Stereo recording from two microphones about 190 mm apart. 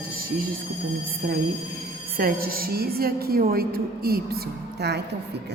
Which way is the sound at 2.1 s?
50° right (ahead or behind).